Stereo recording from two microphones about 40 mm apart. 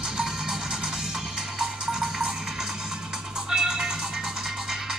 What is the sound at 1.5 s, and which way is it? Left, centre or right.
Music, centre.